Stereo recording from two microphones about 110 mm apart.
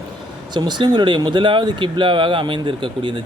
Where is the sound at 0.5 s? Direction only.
45° right (ahead or behind).